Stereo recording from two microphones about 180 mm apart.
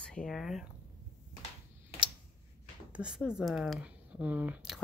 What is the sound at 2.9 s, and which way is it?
Speech, 5° right (ahead or behind).